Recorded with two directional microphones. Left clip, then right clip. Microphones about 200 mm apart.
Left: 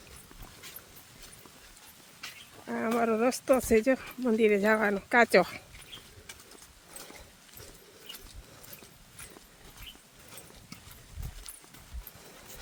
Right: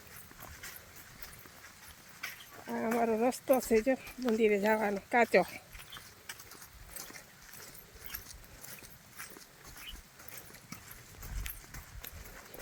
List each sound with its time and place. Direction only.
2.6 s speech: 20° left (ahead or behind)